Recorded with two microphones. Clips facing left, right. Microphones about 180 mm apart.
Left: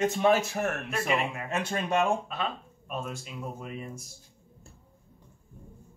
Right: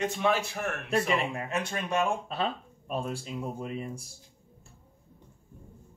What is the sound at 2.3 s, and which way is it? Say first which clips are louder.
Speech: right 2 dB; 35° right (ahead or behind).